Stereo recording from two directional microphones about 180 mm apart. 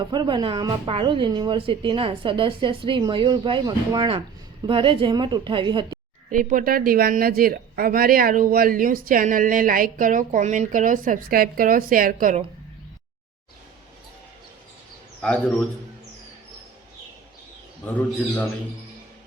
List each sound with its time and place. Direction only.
0.0 s speech: 25° right (ahead or behind)
6.3 s a woman's voice: 50° right (ahead or behind)
15.2 s a man's voice: 5° left (ahead or behind)